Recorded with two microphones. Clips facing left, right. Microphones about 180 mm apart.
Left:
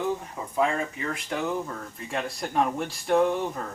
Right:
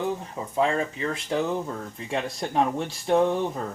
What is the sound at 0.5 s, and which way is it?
Speech, 25° right (ahead or behind).